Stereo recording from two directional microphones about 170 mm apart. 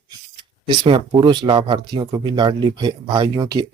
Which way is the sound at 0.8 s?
30° right (ahead or behind).